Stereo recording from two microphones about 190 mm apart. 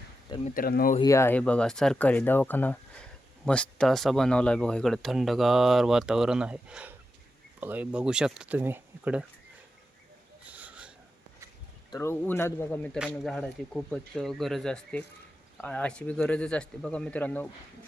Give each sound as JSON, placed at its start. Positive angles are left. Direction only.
{"t": 0.4, "sound": "speech", "side_deg": 50}
{"t": 0.9, "sound": "speech", "side_deg": 15}
{"t": 10.4, "sound": "a sound", "side_deg": -5}
{"t": 11.9, "sound": "speech", "side_deg": 15}